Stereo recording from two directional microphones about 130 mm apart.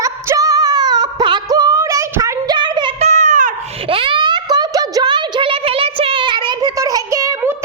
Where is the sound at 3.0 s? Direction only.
65° right (ahead or behind).